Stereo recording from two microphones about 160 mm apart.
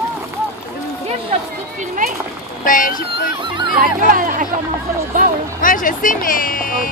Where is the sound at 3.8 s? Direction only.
55° right (ahead or behind).